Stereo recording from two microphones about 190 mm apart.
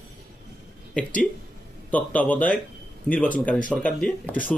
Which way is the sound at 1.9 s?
10° left (ahead or behind).